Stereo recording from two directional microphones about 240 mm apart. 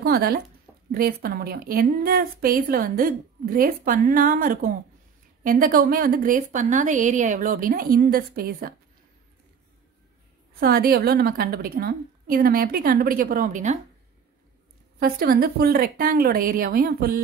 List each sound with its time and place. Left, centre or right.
0.0 s a woman's voice: right
10.6 s a woman's voice: right
15.0 s a woman's voice: right